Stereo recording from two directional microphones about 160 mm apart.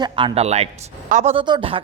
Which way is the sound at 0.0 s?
25° right (ahead or behind).